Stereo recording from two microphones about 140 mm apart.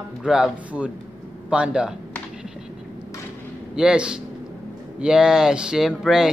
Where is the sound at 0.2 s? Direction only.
5° right (ahead or behind).